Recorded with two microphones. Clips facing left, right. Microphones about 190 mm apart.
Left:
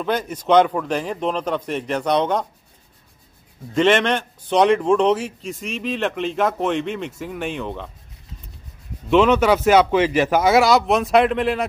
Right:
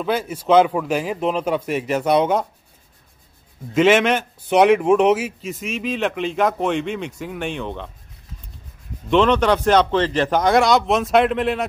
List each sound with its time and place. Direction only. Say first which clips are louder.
0.0 s speech: right 1 dB; 5° right (ahead or behind)
3.7 s a man's voice: right 2 dB; 5° right (ahead or behind)
9.1 s a man's voice: left 1 dB; 5° left (ahead or behind)